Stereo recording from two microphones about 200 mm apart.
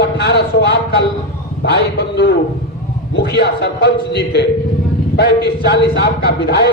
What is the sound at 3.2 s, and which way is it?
A man's voice, 55° left (ahead or behind).